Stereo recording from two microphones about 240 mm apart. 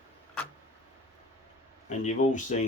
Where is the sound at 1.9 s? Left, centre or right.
Left.